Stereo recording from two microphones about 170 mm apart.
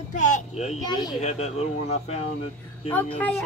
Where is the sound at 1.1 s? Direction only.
40° left (ahead or behind).